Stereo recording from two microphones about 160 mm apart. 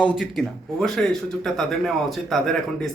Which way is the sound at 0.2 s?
Centre (ahead or behind).